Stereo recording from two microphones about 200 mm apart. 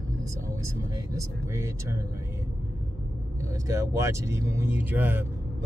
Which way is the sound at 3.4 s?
15° right (ahead or behind).